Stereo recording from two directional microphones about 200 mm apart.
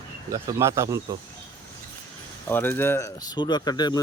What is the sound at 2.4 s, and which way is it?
Speech, 10° left (ahead or behind).